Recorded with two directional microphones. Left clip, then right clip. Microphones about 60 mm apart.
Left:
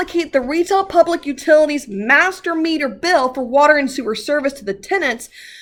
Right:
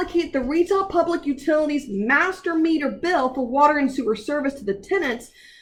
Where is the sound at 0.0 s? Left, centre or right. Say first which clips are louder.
Left 5 dB; left.